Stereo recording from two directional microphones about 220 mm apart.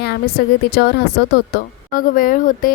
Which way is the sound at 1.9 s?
40° left (ahead or behind).